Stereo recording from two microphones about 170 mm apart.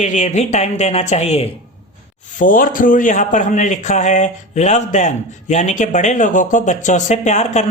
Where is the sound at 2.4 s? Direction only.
55° left (ahead or behind).